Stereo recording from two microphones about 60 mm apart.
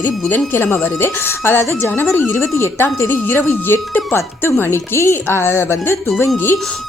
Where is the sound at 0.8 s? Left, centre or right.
Left.